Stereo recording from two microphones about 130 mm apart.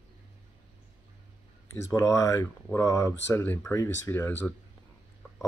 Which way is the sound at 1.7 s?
25° left (ahead or behind).